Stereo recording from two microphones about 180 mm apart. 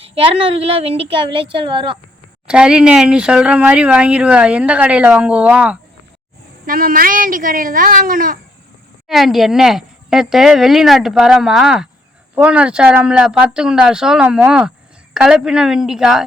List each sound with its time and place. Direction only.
0.1 s a woman's voice: 30° right (ahead or behind)
2.5 s speech: 5° right (ahead or behind)
6.7 s speech: 50° right (ahead or behind)
9.0 s a woman's voice: centre (ahead or behind)